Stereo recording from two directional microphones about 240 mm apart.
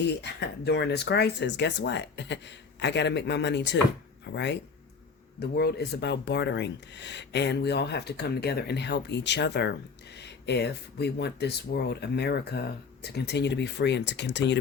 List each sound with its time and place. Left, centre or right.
0.2 s speech: left